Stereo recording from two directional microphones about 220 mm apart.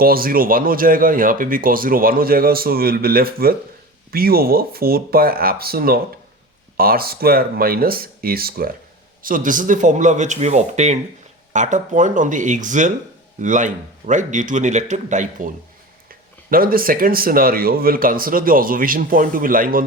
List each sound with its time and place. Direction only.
0.0 s speech: 40° right (ahead or behind)